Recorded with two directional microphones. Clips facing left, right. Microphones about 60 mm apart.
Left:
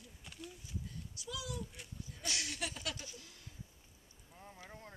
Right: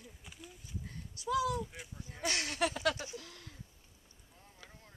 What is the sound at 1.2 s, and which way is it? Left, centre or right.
Speech, right.